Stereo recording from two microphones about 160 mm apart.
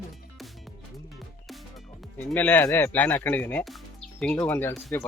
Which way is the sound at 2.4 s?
10° left (ahead or behind).